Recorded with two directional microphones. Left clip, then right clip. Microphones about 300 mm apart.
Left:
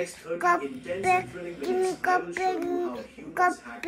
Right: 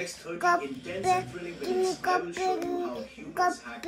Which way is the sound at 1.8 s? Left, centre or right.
Centre.